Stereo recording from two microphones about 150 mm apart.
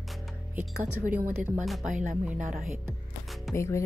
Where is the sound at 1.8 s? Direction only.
60° right (ahead or behind).